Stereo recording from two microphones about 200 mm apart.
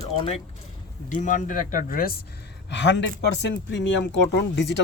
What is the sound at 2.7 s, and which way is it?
Speech, 60° left (ahead or behind).